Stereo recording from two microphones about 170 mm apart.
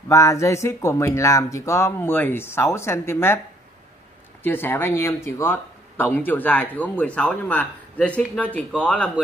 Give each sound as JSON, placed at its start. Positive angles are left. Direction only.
{"t": 0.1, "sound": "speech", "side_deg": 20}
{"t": 4.4, "sound": "speech", "side_deg": 10}